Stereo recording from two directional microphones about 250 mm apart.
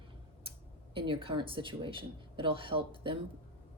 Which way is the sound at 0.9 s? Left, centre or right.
Right.